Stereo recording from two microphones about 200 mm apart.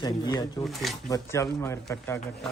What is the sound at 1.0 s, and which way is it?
Speech, 15° left (ahead or behind).